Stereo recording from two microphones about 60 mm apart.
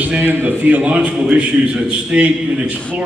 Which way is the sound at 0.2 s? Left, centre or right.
Right.